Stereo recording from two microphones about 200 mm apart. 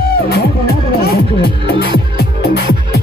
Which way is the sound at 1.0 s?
55° left (ahead or behind).